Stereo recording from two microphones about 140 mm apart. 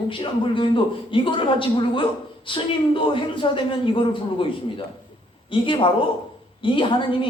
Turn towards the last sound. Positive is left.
turn(degrees=35)  # may be behind; listen again after turning